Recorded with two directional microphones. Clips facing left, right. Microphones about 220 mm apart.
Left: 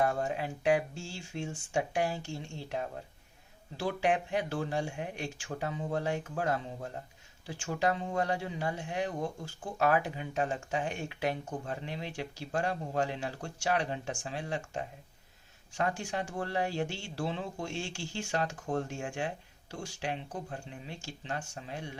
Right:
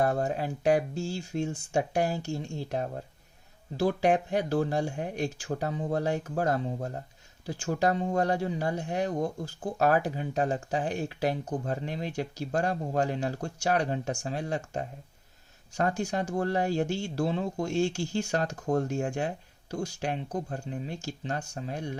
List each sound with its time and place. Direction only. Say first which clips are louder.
0.0 s speech: right 3 dB; 40° right (ahead or behind)